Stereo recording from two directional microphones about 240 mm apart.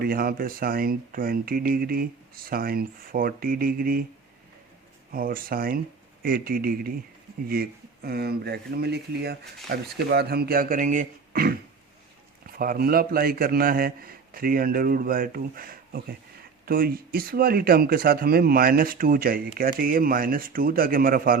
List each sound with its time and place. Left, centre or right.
0.0 s speech: right
5.1 s speech: right
12.5 s speech: right